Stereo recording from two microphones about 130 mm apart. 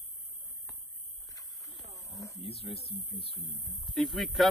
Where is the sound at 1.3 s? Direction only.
25° left (ahead or behind).